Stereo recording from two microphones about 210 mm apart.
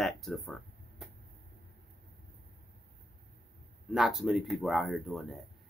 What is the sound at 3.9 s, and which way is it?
Speech, centre (ahead or behind).